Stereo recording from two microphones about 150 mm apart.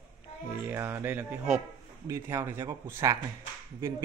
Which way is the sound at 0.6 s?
15° right (ahead or behind).